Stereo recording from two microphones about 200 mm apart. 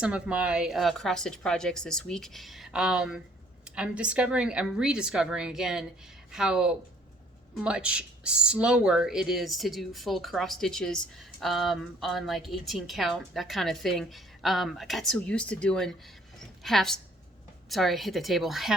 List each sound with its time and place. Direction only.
0.0 s speech: 5° right (ahead or behind)